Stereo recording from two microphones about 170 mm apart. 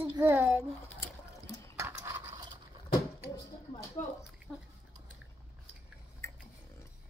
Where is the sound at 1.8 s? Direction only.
15° right (ahead or behind).